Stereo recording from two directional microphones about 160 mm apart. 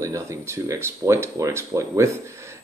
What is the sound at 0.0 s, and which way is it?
Speech, 20° right (ahead or behind).